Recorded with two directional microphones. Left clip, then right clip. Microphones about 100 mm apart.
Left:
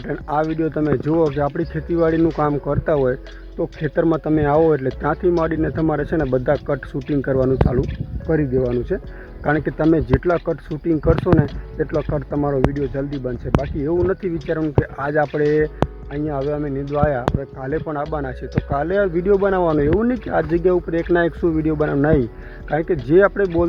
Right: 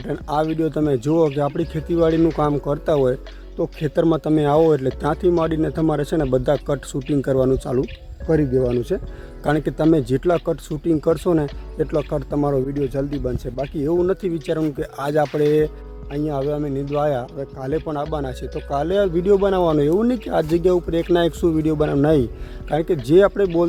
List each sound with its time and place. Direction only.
0.0 s speech: 20° right (ahead or behind)
8.3 s speech: 35° right (ahead or behind)
13.6 s speech: 20° right (ahead or behind)